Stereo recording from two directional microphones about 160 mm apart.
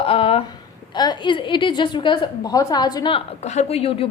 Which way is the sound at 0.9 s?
25° left (ahead or behind).